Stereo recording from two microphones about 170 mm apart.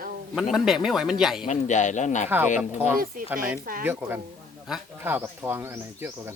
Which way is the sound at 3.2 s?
55° right (ahead or behind).